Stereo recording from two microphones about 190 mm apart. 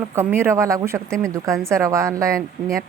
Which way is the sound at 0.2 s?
15° right (ahead or behind).